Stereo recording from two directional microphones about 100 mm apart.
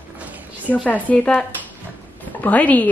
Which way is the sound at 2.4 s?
15° left (ahead or behind).